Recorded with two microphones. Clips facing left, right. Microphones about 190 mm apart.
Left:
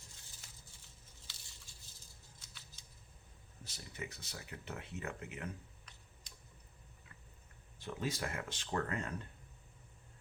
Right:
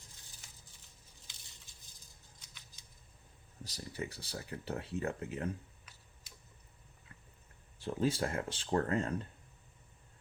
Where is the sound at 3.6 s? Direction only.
35° right (ahead or behind).